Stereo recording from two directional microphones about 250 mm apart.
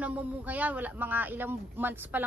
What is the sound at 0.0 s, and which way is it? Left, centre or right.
Speech, centre.